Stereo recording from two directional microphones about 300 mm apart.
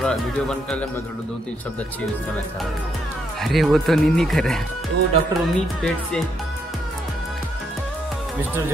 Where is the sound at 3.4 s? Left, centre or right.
Centre.